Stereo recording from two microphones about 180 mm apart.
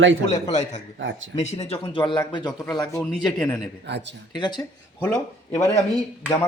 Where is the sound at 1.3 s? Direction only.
35° left (ahead or behind); by 3.6 s 20° left (ahead or behind).